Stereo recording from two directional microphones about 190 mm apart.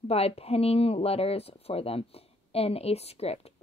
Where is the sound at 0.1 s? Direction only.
30° left (ahead or behind).